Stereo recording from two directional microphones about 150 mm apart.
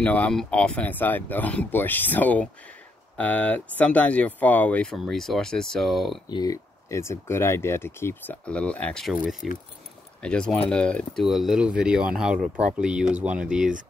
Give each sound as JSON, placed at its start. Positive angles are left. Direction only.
{"t": 0.0, "sound": "speech", "side_deg": 10}
{"t": 6.3, "sound": "speech", "side_deg": 25}
{"t": 9.1, "sound": "speech", "side_deg": -10}
{"t": 10.2, "sound": "speech", "side_deg": 5}